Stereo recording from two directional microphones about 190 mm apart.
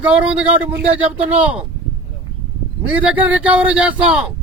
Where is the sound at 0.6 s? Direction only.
30° right (ahead or behind).